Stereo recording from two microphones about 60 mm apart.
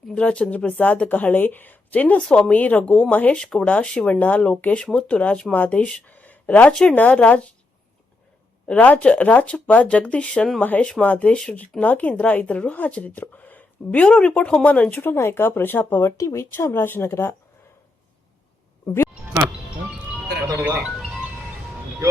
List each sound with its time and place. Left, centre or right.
0.1 s speech: centre
3.4 s speech: centre
8.6 s speech: left
16.1 s speech: left
16.5 s speech: left